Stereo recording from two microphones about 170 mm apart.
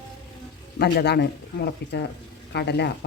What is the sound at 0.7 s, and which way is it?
Speech, 70° left (ahead or behind).